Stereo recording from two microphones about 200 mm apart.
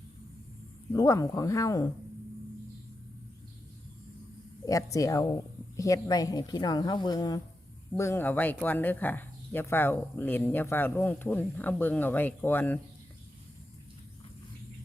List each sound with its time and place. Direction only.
0.9 s speech: 15° left (ahead or behind)
4.6 s speech: 15° left (ahead or behind)